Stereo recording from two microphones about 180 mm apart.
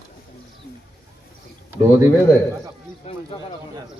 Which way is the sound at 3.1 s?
35° left (ahead or behind).